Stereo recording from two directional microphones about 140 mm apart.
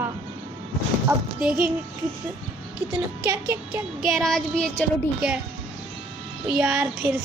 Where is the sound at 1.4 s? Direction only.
5° right (ahead or behind).